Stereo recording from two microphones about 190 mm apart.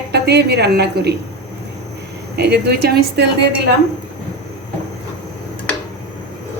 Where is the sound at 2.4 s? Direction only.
60° right (ahead or behind).